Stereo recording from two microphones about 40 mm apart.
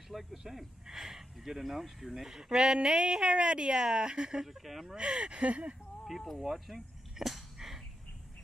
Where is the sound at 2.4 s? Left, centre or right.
Centre.